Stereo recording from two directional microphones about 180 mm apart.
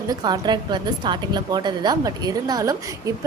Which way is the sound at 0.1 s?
25° right (ahead or behind).